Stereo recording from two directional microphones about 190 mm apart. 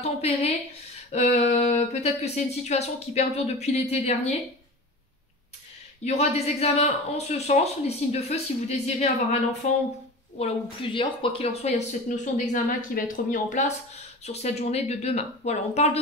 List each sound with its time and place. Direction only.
0.0 s speech: 35° left (ahead or behind)
6.0 s speech: 35° left (ahead or behind)
10.4 s speech: 25° left (ahead or behind)